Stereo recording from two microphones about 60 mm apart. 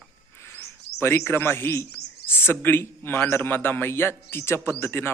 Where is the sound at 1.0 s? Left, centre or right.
Left.